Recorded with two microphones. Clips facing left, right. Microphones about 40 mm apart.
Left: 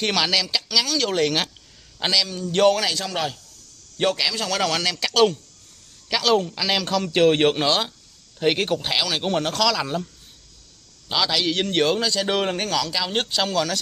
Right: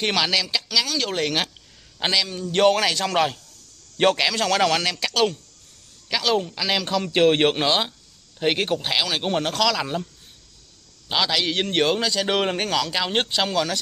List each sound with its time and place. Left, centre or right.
0.0 s a man's voice: centre
2.0 s a man's voice: right
2.7 s a man's voice: right
5.0 s a man's voice: centre
11.1 s a man's voice: centre